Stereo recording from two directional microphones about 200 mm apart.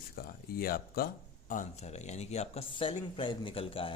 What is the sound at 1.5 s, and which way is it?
Speech, 35° left (ahead or behind).